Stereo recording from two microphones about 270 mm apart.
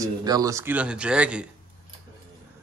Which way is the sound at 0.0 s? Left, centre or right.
Centre.